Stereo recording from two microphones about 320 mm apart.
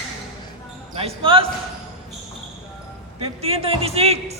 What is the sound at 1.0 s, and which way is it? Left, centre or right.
Basketball bounce, centre.